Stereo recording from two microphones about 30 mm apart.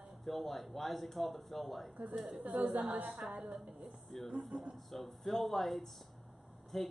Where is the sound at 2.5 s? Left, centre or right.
Right.